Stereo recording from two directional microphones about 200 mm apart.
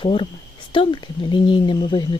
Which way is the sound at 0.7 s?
25° left (ahead or behind).